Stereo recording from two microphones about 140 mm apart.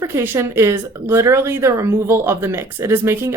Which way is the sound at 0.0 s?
20° right (ahead or behind).